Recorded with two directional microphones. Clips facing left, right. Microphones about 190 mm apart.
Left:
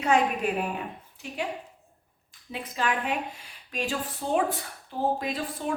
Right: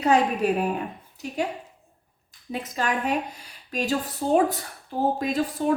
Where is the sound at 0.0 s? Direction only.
40° right (ahead or behind).